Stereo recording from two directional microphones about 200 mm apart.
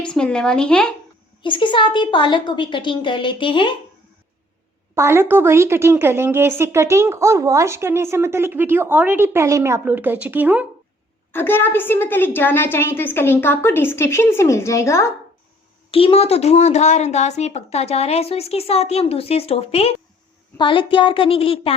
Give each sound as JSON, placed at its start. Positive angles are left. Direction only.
{"t": 0.0, "sound": "a woman's voice", "side_deg": 5}
{"t": 1.4, "sound": "a woman's voice", "side_deg": 25}
{"t": 4.9, "sound": "speech", "side_deg": -10}
{"t": 11.3, "sound": "a woman's voice", "side_deg": 10}
{"t": 15.9, "sound": "a woman's voice", "side_deg": 30}